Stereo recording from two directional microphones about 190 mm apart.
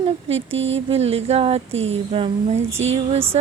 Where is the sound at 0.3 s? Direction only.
80° right.